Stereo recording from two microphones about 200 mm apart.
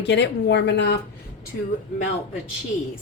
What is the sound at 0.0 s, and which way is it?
Speech, 60° left (ahead or behind).